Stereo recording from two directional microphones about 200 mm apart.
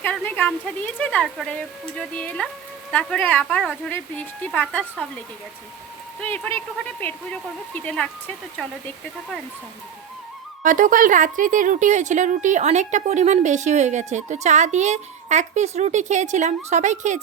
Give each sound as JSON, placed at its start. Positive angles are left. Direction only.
{"t": 0.0, "sound": "a woman's voice", "side_deg": 10}
{"t": 6.2, "sound": "a woman's voice", "side_deg": 10}
{"t": 10.6, "sound": "speech", "side_deg": -40}